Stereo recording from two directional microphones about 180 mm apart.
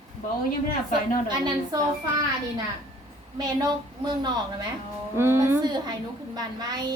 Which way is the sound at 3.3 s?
20° right (ahead or behind).